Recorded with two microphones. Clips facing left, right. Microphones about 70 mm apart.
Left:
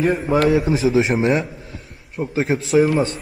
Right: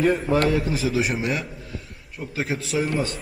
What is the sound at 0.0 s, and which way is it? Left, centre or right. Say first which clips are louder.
Speech: left 1 dB; centre.